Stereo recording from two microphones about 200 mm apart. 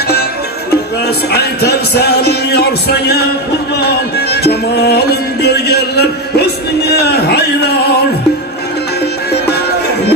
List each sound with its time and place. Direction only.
1.0 s music: 55° left (ahead or behind)